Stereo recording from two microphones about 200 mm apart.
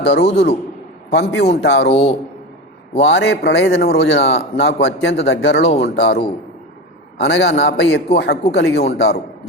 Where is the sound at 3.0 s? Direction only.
60° left (ahead or behind).